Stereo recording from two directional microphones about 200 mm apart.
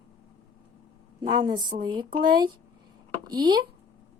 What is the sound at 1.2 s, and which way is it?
Speech, 20° right (ahead or behind).